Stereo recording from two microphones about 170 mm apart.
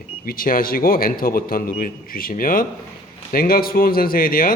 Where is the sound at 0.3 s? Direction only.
55° left (ahead or behind).